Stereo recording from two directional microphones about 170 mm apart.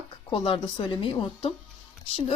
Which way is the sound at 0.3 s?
30° left (ahead or behind).